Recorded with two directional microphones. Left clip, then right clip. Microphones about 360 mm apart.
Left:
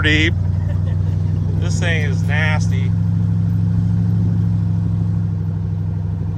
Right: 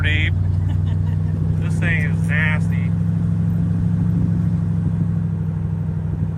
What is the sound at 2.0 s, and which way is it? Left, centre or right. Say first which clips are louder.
Speech: even; centre.